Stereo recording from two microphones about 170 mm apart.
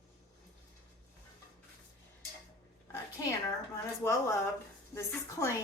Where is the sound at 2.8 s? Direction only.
15° left (ahead or behind).